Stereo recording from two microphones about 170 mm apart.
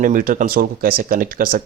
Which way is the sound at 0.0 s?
50° right (ahead or behind).